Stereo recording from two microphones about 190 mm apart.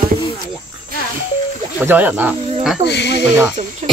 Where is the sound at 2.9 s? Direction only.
65° left (ahead or behind).